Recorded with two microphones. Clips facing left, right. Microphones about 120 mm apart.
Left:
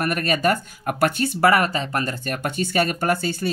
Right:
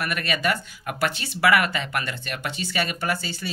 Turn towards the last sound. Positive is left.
turn(degrees=50)  # may be behind; listen again after turning